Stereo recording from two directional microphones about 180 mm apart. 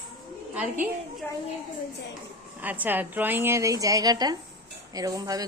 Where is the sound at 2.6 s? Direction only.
10° right (ahead or behind).